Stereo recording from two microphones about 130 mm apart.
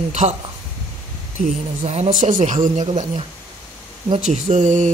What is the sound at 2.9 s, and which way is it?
Speech, 50° right (ahead or behind).